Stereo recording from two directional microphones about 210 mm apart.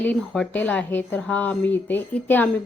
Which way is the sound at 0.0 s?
10° left (ahead or behind).